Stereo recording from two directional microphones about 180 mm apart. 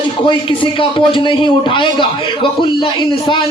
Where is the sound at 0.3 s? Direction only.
30° left (ahead or behind).